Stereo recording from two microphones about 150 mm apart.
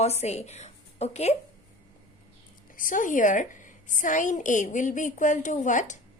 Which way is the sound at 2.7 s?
60° left (ahead or behind).